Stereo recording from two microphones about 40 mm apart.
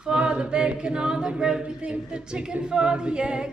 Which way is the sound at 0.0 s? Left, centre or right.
Right.